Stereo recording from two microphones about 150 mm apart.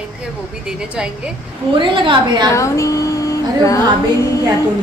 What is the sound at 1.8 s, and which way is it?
Speech, 35° right (ahead or behind).